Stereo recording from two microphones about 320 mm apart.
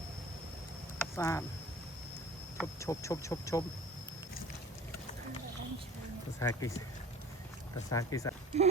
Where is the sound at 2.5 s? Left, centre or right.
Centre.